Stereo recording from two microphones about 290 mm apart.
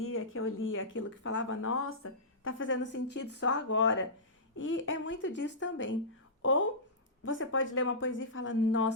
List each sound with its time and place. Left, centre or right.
0.0 s speech: left